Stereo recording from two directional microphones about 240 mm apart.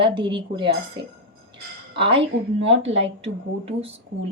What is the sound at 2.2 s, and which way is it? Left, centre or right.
Speech, right.